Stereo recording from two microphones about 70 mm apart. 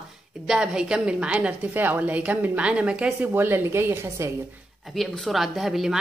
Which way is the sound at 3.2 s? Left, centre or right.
Right.